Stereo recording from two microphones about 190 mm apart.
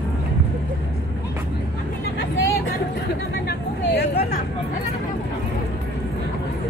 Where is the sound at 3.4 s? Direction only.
60° left (ahead or behind).